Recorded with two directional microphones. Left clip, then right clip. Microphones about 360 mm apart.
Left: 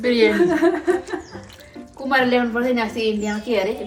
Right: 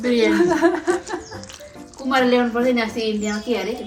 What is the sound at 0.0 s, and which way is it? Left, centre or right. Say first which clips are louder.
Speech: left 2 dB; centre.